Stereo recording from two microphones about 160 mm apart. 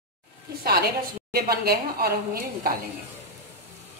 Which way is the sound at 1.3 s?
75° right (ahead or behind).